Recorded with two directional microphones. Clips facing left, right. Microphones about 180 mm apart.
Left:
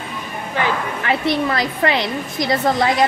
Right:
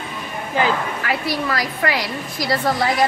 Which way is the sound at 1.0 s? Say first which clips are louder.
Left 6 dB; 25° left (ahead or behind).